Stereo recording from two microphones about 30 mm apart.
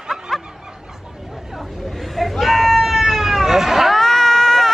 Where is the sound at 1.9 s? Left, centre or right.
Centre.